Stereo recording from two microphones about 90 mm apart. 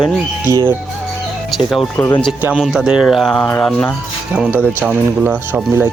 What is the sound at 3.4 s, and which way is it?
Speech, 20° left (ahead or behind).